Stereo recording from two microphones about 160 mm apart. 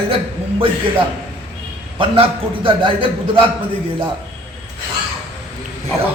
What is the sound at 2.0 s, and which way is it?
A man's voice, 35° right (ahead or behind).